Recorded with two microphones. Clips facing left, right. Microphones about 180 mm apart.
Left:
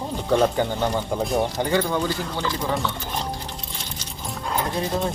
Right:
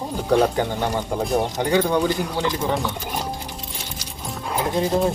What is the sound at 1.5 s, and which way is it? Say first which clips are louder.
Speech: right 3 dB; 15° right (ahead or behind).